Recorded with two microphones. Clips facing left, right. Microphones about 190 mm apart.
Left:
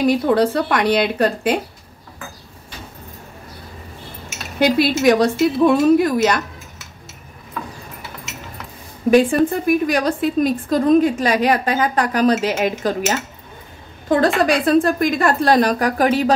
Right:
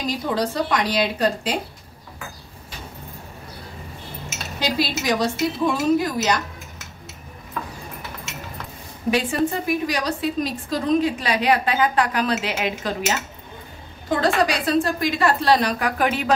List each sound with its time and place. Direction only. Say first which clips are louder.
0.0 s a woman's voice: left 9 dB; 60° left (ahead or behind)
4.6 s a woman's voice: left 8 dB; 60° left (ahead or behind)
9.1 s a woman's voice: left 8 dB; 55° left (ahead or behind)
14.0 s a woman's voice: left 4 dB; 55° left (ahead or behind); by 16.3 s 35° left (ahead or behind)